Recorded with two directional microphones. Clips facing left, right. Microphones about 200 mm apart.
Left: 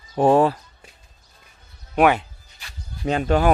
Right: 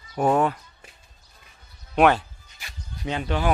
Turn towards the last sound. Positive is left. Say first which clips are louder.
# left 7 dB
turn(degrees=45)  # may be behind; listen again after turning